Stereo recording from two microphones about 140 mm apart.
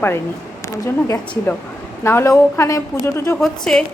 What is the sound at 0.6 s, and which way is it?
Speech, 20° left (ahead or behind).